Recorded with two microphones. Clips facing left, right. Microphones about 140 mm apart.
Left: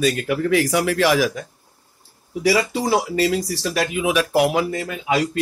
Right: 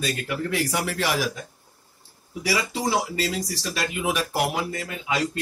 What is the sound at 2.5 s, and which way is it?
Speech, 60° left (ahead or behind).